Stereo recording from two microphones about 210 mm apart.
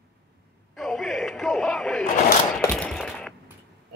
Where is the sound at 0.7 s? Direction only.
Centre (ahead or behind).